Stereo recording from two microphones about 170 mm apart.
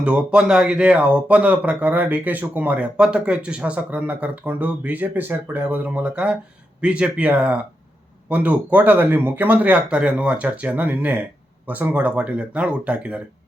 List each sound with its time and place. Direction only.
0.0 s speech: 5° right (ahead or behind)